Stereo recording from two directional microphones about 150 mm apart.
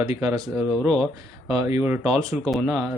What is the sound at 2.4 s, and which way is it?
Speech, centre (ahead or behind).